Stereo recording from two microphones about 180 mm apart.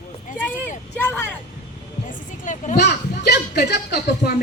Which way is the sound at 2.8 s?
65° left (ahead or behind).